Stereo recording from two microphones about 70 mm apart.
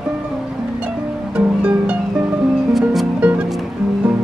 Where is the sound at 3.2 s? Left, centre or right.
Centre.